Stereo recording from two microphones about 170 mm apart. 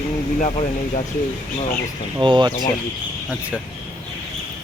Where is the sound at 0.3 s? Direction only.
40° left (ahead or behind).